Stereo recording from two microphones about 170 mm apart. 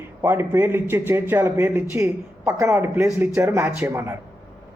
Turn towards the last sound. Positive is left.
turn(degrees=-15)  # may be behind; listen again after turning